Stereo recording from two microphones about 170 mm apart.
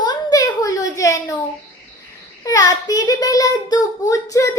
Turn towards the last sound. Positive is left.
turn(degrees=20)  # may be behind; listen again after turning